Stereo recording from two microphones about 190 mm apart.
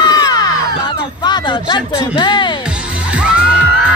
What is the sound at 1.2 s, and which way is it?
Music, 25° left (ahead or behind).